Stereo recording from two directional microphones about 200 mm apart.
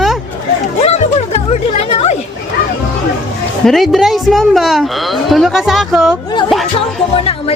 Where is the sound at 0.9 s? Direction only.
30° left (ahead or behind).